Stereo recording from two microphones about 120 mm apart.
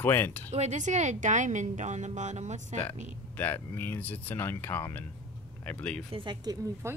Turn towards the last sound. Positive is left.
turn(degrees=-25)  # may be behind; listen again after turning